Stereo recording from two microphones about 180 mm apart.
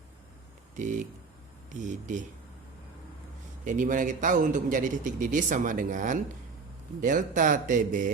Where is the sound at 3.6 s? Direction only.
45° right (ahead or behind).